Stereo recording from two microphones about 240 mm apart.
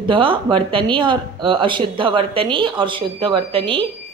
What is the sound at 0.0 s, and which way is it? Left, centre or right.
Speech, right.